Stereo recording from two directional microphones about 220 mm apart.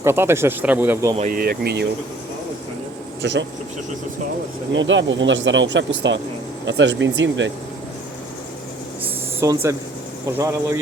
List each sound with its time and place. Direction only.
0.0 s speech: 10° right (ahead or behind)
1.1 s speech: 35° right (ahead or behind)
3.2 s speech: 55° right (ahead or behind)
4.7 s speech: 55° right (ahead or behind)
9.4 s speech: 15° right (ahead or behind)